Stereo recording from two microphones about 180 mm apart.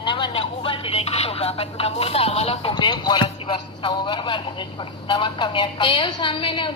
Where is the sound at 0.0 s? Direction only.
30° left (ahead or behind).